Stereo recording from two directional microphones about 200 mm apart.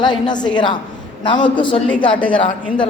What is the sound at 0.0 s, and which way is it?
A man's voice, 20° left (ahead or behind).